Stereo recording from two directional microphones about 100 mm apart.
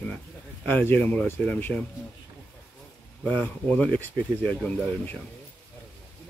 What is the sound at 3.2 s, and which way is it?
Speech, 15° left (ahead or behind).